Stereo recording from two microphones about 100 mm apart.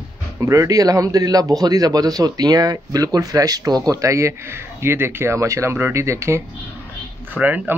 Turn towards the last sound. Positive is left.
turn(degrees=-15)  # may be behind; listen again after turning